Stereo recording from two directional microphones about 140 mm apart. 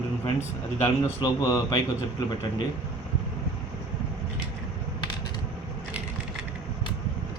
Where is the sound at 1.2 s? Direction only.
20° left (ahead or behind).